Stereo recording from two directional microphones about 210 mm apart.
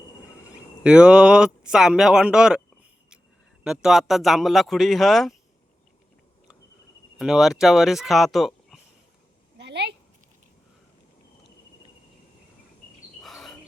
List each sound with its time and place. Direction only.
0.5 s speech: 5° right (ahead or behind)
3.6 s speech: 5° right (ahead or behind)
7.2 s speech: centre (ahead or behind)
9.6 s a sound: 55° right (ahead or behind)
13.2 s bird: centre (ahead or behind)